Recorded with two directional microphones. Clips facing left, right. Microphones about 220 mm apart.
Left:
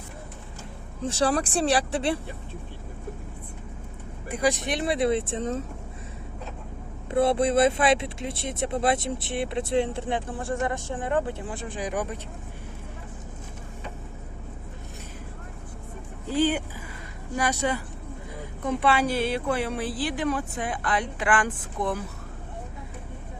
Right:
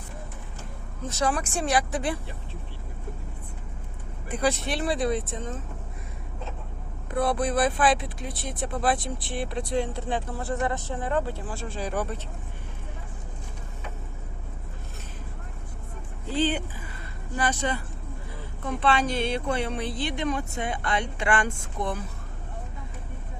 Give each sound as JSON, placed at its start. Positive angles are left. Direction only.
{"t": 1.0, "sound": "speech", "side_deg": 30}
{"t": 4.3, "sound": "speech", "side_deg": 10}
{"t": 7.1, "sound": "speech", "side_deg": 25}
{"t": 16.2, "sound": "speech", "side_deg": 10}